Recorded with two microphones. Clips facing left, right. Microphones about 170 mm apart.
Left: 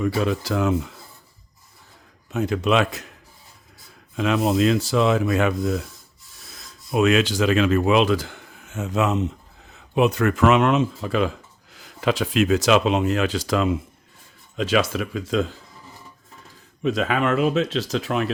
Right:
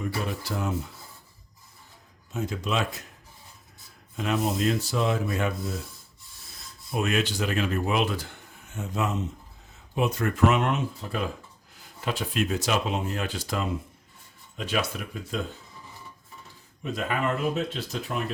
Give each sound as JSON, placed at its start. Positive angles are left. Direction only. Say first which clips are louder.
{"t": 0.2, "sound": "speech", "louder": "left 9 dB", "side_deg": 90}
{"t": 2.3, "sound": "speech", "louder": "left 8 dB", "side_deg": 70}
{"t": 4.2, "sound": "speech", "louder": "left 7 dB", "side_deg": 90}
{"t": 16.8, "sound": "speech", "louder": "left 7 dB", "side_deg": 90}